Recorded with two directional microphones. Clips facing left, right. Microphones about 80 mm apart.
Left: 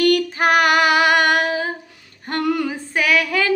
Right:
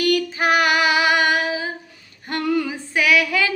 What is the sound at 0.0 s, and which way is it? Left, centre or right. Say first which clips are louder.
Female singing: left 3 dB; left.